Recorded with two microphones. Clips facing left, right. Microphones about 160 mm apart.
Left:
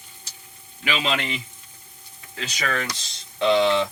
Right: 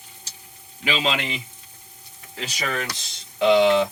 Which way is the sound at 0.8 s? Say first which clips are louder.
Right 1 dB; 25° right (ahead or behind).